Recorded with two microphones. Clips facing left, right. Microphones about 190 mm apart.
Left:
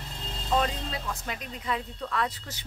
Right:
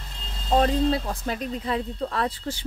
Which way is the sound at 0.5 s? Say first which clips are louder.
Right 8 dB; 35° right (ahead or behind).